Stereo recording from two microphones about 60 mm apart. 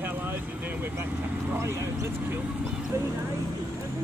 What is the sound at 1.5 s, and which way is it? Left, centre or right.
Speech, right.